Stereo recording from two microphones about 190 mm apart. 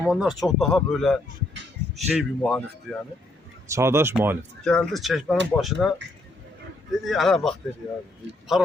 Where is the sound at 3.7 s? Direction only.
15° right (ahead or behind).